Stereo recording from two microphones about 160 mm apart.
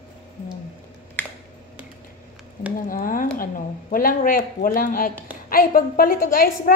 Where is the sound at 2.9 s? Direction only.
60° left (ahead or behind).